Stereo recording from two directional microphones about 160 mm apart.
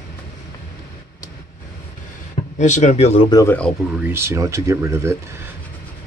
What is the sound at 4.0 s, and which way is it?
Speech, 15° right (ahead or behind).